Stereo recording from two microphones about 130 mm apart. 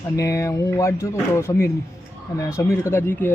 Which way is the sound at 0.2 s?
25° left (ahead or behind).